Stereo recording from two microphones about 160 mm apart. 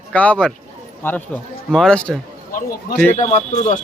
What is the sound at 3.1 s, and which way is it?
Speech, 40° left (ahead or behind).